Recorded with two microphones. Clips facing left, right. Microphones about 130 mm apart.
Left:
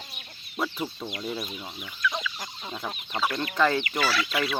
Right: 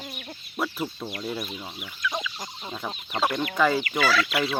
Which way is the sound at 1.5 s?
15° right (ahead or behind).